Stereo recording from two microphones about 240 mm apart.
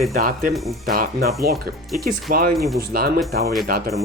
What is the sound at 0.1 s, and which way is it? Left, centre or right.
Speech, right.